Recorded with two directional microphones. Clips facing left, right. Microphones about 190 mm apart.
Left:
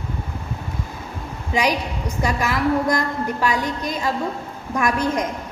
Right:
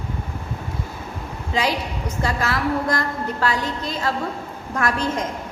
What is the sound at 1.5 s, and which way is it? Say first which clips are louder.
A woman's voice: left 2 dB; 15° left (ahead or behind).